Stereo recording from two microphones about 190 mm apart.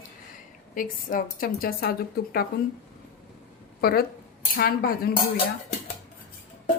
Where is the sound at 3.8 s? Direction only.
55° left (ahead or behind).